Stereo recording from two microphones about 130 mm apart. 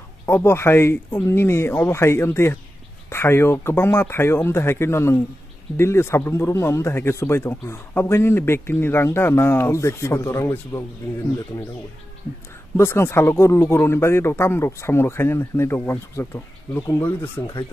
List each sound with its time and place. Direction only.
0.3 s speech: 20° left (ahead or behind)
12.7 s speech: 20° left (ahead or behind)